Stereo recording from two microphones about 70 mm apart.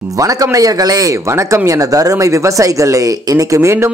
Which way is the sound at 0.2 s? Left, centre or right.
Right.